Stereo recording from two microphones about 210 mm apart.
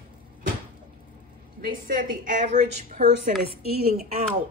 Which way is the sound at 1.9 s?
40° right (ahead or behind).